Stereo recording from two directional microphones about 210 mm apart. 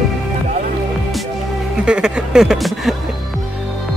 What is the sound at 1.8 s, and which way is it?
Speech, 5° right (ahead or behind).